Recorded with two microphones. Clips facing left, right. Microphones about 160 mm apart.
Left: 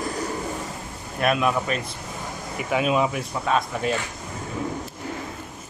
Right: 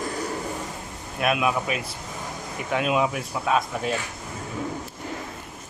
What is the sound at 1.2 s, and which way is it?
Speech, 5° right (ahead or behind).